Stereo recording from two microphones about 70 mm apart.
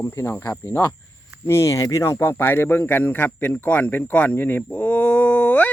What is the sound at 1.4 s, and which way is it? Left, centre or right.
Speech, left.